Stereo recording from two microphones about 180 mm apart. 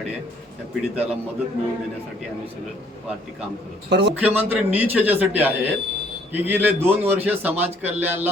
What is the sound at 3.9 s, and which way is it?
Speech, 75° right (ahead or behind).